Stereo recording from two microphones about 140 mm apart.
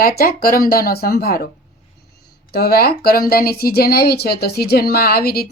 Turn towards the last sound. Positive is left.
turn(degrees=90)